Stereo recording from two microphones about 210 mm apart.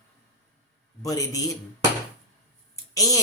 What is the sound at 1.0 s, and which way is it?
Speech, 15° left (ahead or behind).